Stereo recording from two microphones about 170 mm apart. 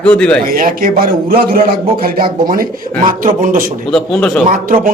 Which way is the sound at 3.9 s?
5° left (ahead or behind).